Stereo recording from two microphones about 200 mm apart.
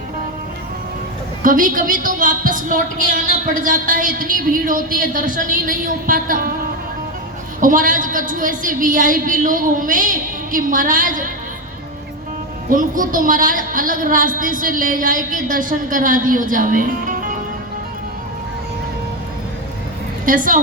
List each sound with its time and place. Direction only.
1.4 s a woman's voice: 45° right (ahead or behind)
7.6 s a woman's voice: 40° right (ahead or behind)
12.6 s a woman's voice: 45° right (ahead or behind)
20.2 s a woman's voice: 40° right (ahead or behind)